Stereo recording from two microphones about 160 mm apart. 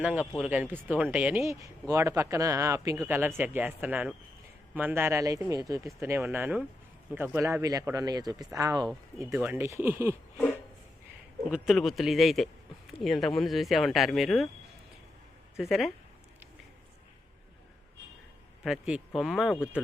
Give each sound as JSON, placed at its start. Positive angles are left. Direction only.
{"t": 0.0, "sound": "speech", "side_deg": -10}
{"t": 1.5, "sound": "speech", "side_deg": -20}
{"t": 11.5, "sound": "speech", "side_deg": 0}
{"t": 15.5, "sound": "speech", "side_deg": 0}
{"t": 18.6, "sound": "speech", "side_deg": -5}